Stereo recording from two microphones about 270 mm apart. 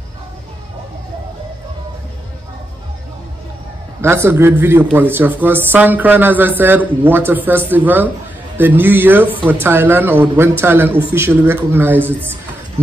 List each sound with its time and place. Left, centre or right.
4.0 s speech: centre